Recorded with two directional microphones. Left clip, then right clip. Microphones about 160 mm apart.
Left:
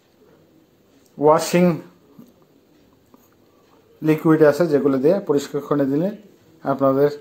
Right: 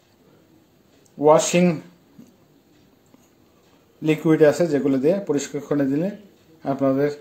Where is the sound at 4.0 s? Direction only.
10° left (ahead or behind).